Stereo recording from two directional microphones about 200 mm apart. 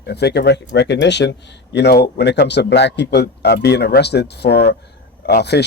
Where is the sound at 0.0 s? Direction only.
55° left (ahead or behind).